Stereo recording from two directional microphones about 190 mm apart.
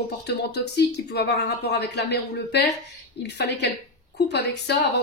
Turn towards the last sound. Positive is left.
turn(degrees=65)  # may be behind; listen again after turning